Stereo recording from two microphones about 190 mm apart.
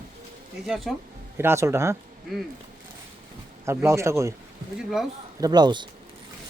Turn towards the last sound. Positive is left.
turn(degrees=-25)  # may be behind; listen again after turning